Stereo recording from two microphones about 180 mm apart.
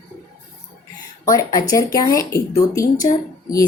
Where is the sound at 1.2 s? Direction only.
20° left (ahead or behind).